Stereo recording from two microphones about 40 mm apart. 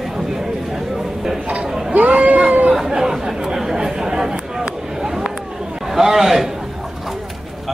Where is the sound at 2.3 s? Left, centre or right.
Right.